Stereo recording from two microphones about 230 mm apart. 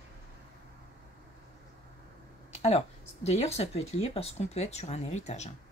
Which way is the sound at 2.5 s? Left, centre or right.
Left.